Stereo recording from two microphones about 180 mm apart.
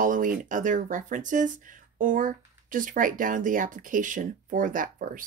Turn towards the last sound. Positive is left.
turn(degrees=-50)  # may be behind; listen again after turning